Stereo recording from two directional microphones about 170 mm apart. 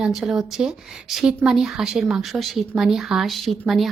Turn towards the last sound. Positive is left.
turn(degrees=0)  # may be behind; listen again after turning